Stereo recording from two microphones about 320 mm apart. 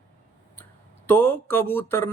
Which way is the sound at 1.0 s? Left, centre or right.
Centre.